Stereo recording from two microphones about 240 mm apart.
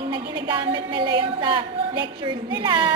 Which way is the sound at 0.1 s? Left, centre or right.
Centre.